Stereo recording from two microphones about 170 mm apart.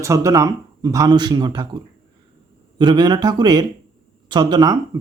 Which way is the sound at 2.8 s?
25° right (ahead or behind).